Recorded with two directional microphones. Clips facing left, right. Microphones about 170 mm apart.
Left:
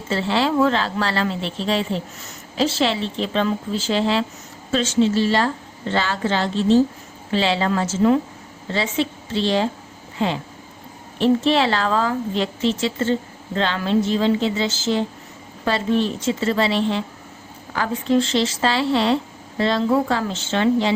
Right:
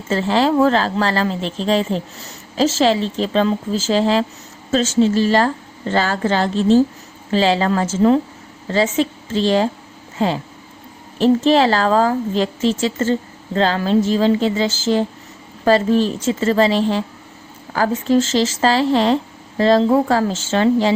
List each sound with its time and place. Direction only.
0.1 s a woman's voice: 40° right (ahead or behind)